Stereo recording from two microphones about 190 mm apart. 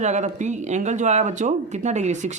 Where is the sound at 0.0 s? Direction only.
40° right (ahead or behind).